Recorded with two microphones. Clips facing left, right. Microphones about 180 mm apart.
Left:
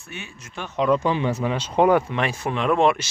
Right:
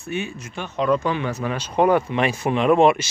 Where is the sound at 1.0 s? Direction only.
25° left (ahead or behind).